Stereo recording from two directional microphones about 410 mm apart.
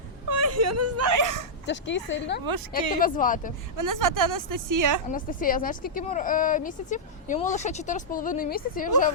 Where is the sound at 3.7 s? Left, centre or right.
Right.